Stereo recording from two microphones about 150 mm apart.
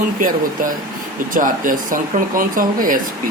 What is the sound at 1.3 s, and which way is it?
Speech, 65° right (ahead or behind).